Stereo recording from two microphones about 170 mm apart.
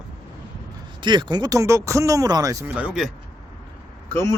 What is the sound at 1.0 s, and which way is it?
Speech, 25° right (ahead or behind).